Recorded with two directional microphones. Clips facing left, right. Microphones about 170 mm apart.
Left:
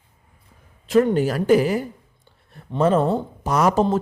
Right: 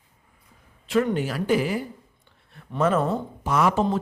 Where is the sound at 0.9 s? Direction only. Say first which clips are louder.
Left 5 dB; 40° left (ahead or behind).